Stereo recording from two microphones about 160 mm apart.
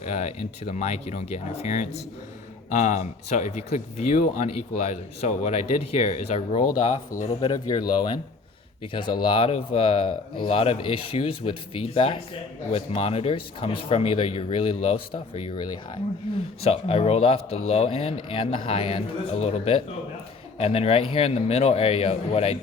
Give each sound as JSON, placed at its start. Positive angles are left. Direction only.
{"t": 0.0, "sound": "speech", "side_deg": 45}
{"t": 7.4, "sound": "speech", "side_deg": 25}
{"t": 16.6, "sound": "speech", "side_deg": 40}